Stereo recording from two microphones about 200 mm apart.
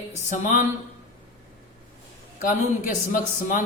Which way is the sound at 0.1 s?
35° left (ahead or behind).